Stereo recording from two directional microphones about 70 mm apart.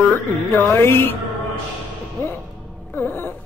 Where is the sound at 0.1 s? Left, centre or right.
Left.